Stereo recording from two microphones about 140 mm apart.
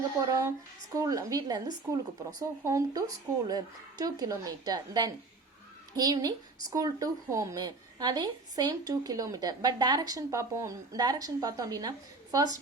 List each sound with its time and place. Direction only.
0.2 s a woman's voice: 25° right (ahead or behind)